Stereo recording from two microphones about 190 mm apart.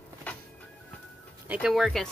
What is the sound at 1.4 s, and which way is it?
Speech, 5° right (ahead or behind).